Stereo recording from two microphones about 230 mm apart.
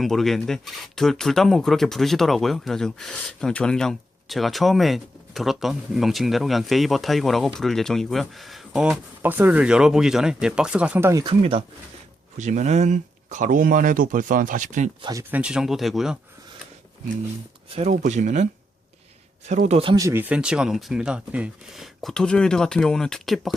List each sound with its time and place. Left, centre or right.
0.0 s speech: centre; by 14.8 s right
15.0 s speech: centre
17.7 s speech: right
19.5 s speech: right; by 23.6 s centre